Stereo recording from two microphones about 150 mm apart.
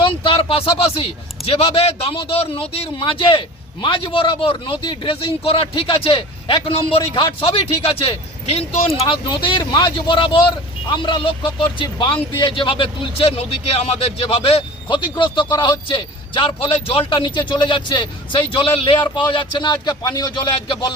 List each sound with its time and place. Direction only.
0.0 s speech: 35° left (ahead or behind)